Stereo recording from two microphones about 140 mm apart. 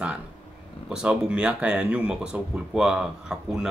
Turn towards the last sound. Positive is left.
turn(degrees=-5)  # may be behind; listen again after turning